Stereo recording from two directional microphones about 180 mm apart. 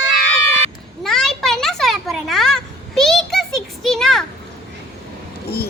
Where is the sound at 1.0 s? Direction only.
Centre (ahead or behind).